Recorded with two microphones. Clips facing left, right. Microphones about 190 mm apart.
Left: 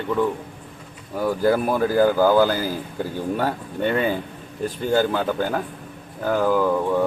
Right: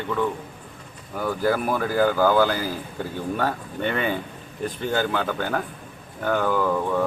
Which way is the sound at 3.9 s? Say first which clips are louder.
Left 3 dB; 35° left (ahead or behind).